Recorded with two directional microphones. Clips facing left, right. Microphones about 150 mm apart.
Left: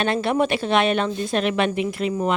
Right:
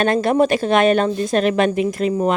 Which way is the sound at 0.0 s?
45° right (ahead or behind).